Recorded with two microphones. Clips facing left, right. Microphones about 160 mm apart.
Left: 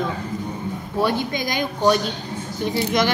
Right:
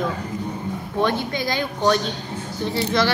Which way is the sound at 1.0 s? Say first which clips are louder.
Even; 15° left (ahead or behind).